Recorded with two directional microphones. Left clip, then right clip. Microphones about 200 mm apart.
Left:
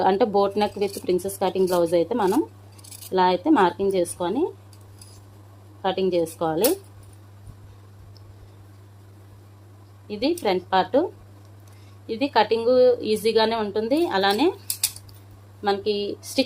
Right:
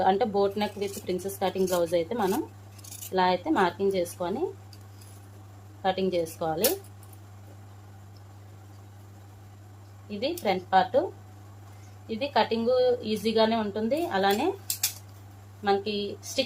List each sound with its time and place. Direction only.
0.0 s speech: 40° left (ahead or behind)
5.8 s speech: 35° left (ahead or behind)
10.1 s a woman's voice: 45° left (ahead or behind)
12.0 s a woman's voice: 45° left (ahead or behind)
15.6 s speech: 40° left (ahead or behind)